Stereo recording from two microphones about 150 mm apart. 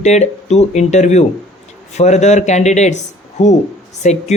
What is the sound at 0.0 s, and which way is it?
Speech, 50° left (ahead or behind).